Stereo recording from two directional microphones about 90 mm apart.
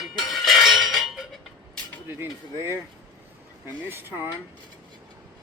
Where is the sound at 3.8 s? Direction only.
25° right (ahead or behind).